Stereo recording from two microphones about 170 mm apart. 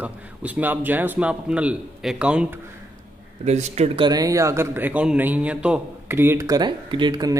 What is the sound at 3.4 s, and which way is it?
Speech, 40° right (ahead or behind).